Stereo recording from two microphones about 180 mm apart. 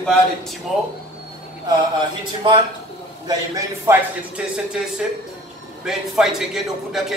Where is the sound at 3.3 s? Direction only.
15° right (ahead or behind).